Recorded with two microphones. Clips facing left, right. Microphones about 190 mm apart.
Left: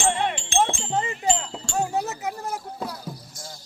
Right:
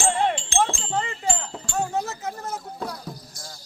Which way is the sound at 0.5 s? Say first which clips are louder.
Left 1 dB; 20° left (ahead or behind).